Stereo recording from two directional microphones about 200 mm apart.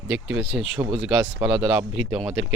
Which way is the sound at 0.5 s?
5° right (ahead or behind).